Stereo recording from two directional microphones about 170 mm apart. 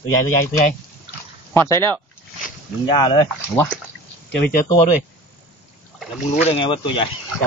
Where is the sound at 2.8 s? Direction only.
25° left (ahead or behind).